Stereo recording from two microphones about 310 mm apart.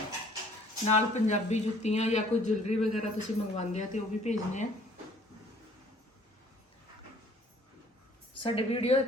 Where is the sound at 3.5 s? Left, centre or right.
Left.